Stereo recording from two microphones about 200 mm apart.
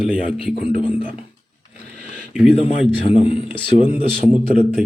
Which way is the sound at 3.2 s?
25° left (ahead or behind).